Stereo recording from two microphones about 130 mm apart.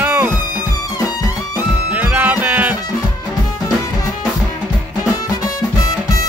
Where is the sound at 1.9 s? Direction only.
10° right (ahead or behind).